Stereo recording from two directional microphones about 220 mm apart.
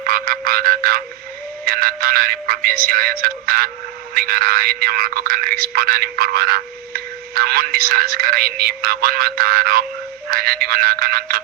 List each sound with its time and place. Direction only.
0.0 s frog: 40° right (ahead or behind)
1.6 s speech: 40° right (ahead or behind)